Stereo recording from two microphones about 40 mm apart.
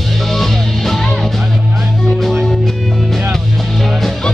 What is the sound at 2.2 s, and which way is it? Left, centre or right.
Music, centre.